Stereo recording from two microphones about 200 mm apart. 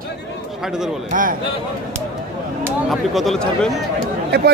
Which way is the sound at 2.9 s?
Centre (ahead or behind).